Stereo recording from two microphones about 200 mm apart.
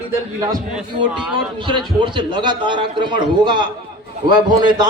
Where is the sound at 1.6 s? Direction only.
25° right (ahead or behind).